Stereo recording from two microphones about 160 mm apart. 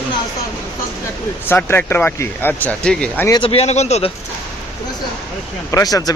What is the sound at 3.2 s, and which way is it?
Speech, 30° left (ahead or behind).